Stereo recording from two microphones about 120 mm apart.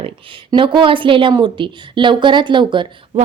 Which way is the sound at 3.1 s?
60° right (ahead or behind).